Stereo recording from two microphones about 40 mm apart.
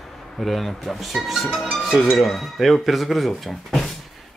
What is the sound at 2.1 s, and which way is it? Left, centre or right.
Speech, centre.